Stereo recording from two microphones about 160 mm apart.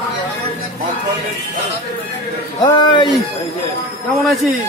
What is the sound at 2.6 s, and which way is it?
Speech, 25° left (ahead or behind).